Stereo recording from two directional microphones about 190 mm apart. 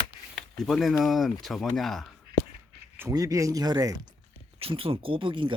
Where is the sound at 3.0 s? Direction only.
15° right (ahead or behind).